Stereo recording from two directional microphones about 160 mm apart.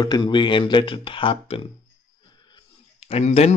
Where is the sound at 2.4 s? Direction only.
35° left (ahead or behind).